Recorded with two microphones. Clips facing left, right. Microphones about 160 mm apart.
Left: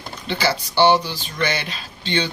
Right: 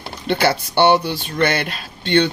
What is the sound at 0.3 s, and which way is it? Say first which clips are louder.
Speech: right 5 dB; 60° right (ahead or behind).